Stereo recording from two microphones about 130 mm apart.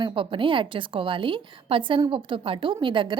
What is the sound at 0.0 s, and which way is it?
A woman's voice, 40° right (ahead or behind).